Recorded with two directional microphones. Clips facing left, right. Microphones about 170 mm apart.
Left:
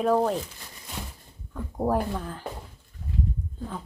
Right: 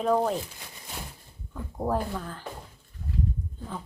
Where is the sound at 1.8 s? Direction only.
10° left (ahead or behind).